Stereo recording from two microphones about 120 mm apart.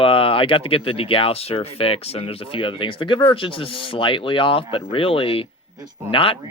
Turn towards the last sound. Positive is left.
turn(degrees=50)  # may be behind; listen again after turning